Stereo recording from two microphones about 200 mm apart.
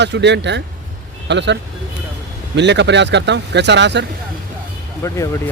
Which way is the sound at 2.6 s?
60° right (ahead or behind).